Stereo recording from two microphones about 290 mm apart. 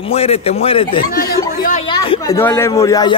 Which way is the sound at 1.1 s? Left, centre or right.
Left.